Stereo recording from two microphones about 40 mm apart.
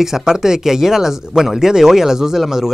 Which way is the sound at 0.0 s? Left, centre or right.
Centre.